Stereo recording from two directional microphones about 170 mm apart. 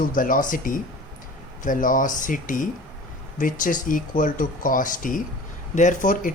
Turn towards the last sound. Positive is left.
turn(degrees=50)  # may be behind; listen again after turning